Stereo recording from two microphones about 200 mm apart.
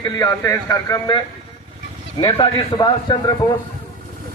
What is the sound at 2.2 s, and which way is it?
A man's voice, 25° left (ahead or behind).